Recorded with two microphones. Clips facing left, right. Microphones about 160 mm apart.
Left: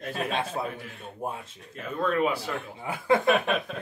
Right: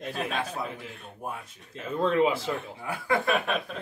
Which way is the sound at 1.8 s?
25° right (ahead or behind).